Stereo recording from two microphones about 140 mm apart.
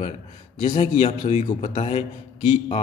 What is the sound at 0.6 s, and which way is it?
A man's voice, 35° left (ahead or behind).